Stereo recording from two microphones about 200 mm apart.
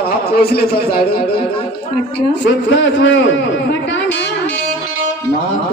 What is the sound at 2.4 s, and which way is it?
A man's voice, 65° left (ahead or behind).